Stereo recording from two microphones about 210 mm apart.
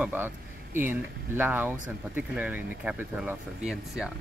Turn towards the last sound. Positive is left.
turn(degrees=-5)  # may be behind; listen again after turning